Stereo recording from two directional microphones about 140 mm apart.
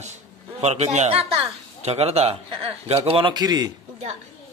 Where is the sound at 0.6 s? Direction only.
50° right (ahead or behind); by 3.7 s 30° right (ahead or behind).